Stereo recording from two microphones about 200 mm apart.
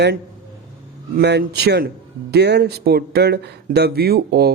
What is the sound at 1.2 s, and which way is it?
Speech, 55° right (ahead or behind).